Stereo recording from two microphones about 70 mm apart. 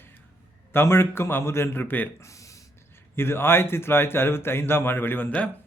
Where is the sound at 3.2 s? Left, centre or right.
Left.